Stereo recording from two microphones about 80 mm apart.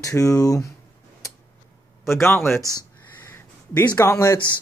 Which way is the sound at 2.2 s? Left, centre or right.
Left.